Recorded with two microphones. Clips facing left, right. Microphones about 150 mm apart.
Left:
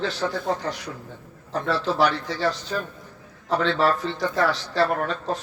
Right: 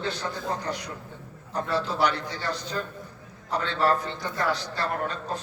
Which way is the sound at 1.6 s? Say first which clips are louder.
Left 3 dB; 90° left.